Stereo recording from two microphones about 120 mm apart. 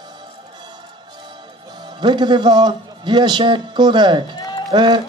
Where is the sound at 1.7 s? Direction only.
40° right (ahead or behind).